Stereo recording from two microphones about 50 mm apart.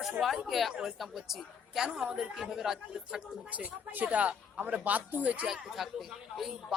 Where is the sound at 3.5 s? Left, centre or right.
Right.